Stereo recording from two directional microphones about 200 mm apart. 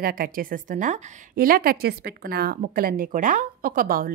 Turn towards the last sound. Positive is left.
turn(degrees=-45)  # may be behind; listen again after turning